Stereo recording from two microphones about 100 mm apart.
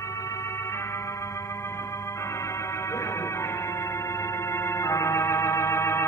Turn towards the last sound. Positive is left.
turn(degrees=25)  # may be behind; listen again after turning